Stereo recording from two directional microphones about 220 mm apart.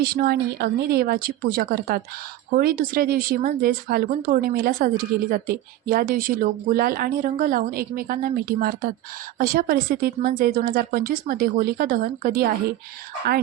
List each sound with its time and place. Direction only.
0.0 s speech: 45° right (ahead or behind)